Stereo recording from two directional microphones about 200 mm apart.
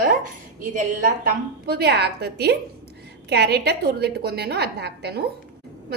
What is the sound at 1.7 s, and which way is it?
A woman's voice, 55° right (ahead or behind).